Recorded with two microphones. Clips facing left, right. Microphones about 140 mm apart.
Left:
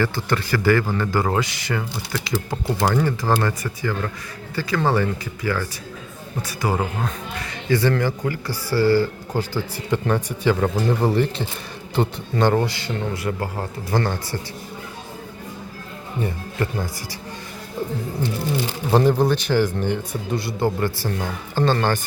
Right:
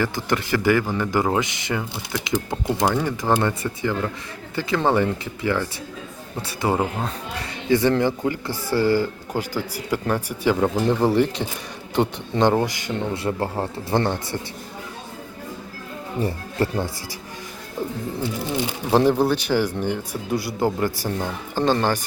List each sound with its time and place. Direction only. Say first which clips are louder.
0.0 s a man's voice: left 1 dB; 15° right (ahead or behind)
13.2 s a man's voice: right 2 dB; 25° right (ahead or behind)
16.2 s speech: right 2 dB; 30° right (ahead or behind)
18.2 s speech: left 1 dB; 5° right (ahead or behind)